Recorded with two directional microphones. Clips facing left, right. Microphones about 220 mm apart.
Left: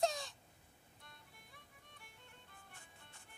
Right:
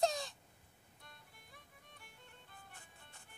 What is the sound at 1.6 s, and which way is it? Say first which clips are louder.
Music: right 1 dB; 40° right (ahead or behind).